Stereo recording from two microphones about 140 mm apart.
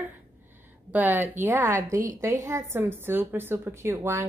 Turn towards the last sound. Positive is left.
turn(degrees=-20)  # may be behind; listen again after turning